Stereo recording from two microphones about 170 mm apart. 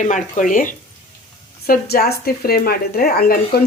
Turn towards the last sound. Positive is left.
turn(degrees=60)  # may be behind; listen again after turning